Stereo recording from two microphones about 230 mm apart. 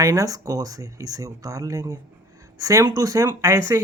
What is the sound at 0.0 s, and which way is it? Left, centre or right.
Speech, centre.